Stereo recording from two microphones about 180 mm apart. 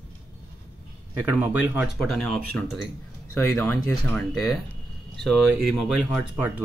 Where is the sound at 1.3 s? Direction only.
10° right (ahead or behind).